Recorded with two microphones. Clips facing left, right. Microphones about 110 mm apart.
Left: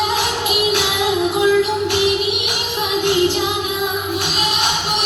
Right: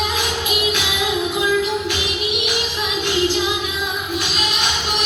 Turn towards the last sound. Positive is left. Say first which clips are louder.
# left 3 dB
turn(degrees=55)  # may be behind; listen again after turning